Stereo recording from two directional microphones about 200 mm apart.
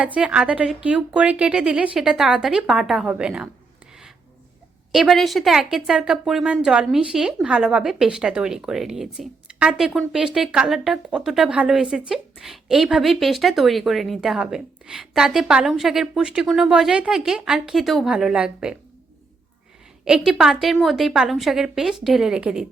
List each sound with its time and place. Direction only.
0.0 s speech: 5° right (ahead or behind)
4.9 s speech: centre (ahead or behind)
20.1 s speech: centre (ahead or behind)